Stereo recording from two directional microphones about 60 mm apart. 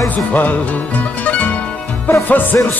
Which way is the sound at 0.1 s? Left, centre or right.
Left.